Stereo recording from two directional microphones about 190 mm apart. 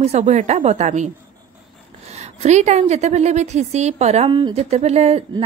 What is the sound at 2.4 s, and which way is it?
A woman's voice, 35° right (ahead or behind).